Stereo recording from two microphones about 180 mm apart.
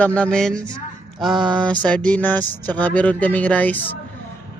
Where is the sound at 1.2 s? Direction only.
Centre (ahead or behind).